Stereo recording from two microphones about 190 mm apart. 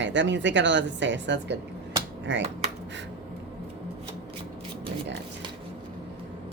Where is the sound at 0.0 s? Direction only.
70° right (ahead or behind).